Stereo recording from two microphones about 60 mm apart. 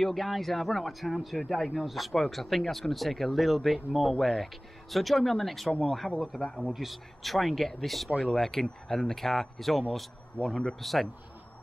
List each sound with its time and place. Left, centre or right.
0.0 s speech: centre
5.7 s a man's voice: centre
6.7 s speech: centre
10.3 s a man's voice: centre
10.8 s speech: centre